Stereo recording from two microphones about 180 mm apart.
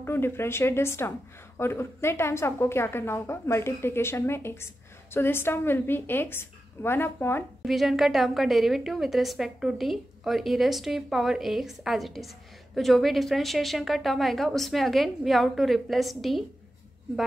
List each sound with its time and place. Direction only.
0.0 s a woman's voice: 15° left (ahead or behind)
7.6 s a woman's voice: centre (ahead or behind)